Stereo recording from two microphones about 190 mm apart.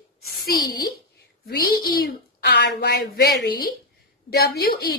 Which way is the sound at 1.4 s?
55° left (ahead or behind).